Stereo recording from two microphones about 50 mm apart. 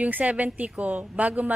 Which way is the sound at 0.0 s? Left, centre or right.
Right.